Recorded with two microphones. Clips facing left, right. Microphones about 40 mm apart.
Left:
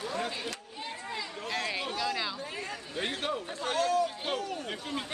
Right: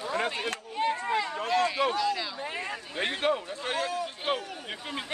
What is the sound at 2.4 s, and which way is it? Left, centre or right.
Speech, right.